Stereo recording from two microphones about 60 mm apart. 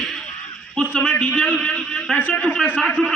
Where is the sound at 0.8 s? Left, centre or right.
Left.